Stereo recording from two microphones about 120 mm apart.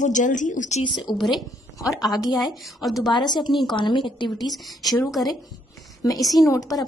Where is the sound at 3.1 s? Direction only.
40° left (ahead or behind).